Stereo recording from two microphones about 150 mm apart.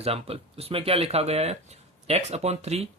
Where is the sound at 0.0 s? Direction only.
40° right (ahead or behind).